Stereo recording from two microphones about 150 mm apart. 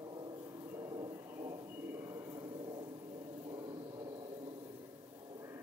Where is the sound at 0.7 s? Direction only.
25° right (ahead or behind).